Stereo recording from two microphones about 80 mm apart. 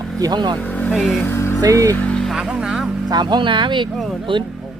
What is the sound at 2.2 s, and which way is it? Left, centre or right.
Speech, centre.